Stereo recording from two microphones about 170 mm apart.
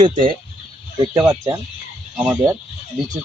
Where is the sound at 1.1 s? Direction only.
20° right (ahead or behind).